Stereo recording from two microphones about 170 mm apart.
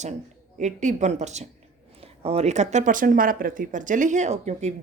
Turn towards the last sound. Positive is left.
turn(degrees=-40)  # may be behind; listen again after turning